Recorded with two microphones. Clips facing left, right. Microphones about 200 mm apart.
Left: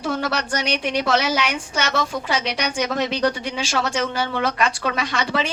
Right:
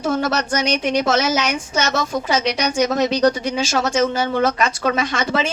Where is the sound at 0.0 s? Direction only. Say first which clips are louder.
Right 4 dB; 45° right (ahead or behind).